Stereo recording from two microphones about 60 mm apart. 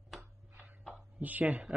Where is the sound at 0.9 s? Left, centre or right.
Right.